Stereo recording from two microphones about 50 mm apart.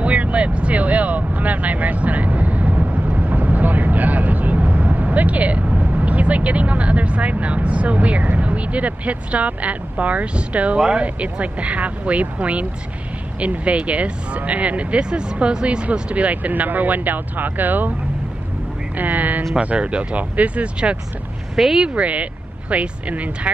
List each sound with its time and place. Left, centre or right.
0.0 s vehicle: right
10.8 s speech: right
18.9 s speech: right
19.6 s speech: right
21.5 s speech: centre
21.8 s speech: right